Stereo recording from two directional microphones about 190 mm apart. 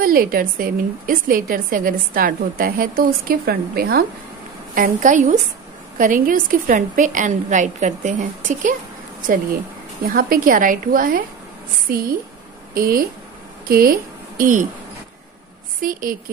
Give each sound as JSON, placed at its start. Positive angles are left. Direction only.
{"t": 0.0, "sound": "a woman's voice", "side_deg": -50}
{"t": 4.7, "sound": "a woman's voice", "side_deg": -45}
{"t": 10.0, "sound": "a woman's voice", "side_deg": -50}
{"t": 15.8, "sound": "a woman's voice", "side_deg": -45}